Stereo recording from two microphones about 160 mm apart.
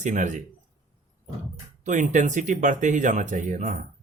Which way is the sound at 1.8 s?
50° right (ahead or behind).